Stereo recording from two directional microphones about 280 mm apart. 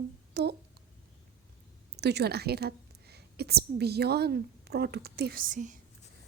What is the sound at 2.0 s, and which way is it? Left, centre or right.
A woman's voice, right.